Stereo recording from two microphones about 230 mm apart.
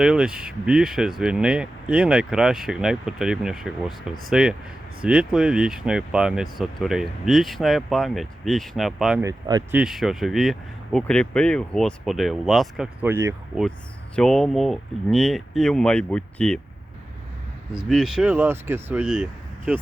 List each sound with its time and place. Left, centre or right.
0.0 s speech: centre
9.2 s speech: centre
9.7 s speech: centre
14.2 s speech: centre
17.7 s speech: centre